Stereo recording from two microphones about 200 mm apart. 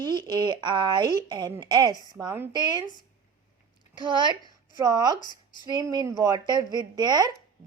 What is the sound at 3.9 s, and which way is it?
A woman's voice, 25° right (ahead or behind).